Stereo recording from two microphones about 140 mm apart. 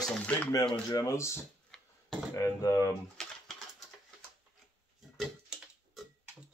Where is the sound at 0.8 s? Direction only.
25° left (ahead or behind).